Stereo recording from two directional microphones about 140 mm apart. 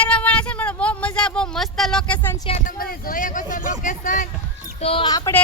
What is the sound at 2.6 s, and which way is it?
Speech, 90° left.